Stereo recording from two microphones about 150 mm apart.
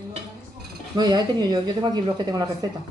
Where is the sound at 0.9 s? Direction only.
25° right (ahead or behind).